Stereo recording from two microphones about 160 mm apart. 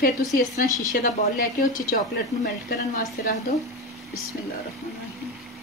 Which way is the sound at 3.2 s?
60° left (ahead or behind).